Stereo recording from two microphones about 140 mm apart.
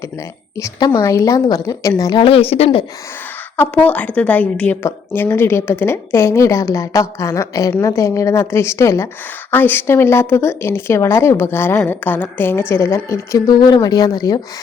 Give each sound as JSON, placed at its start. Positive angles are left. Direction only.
{"t": 0.5, "sound": "a woman's voice", "side_deg": 25}
{"t": 2.2, "sound": "speech", "side_deg": 45}
{"t": 3.6, "sound": "a woman's voice", "side_deg": 10}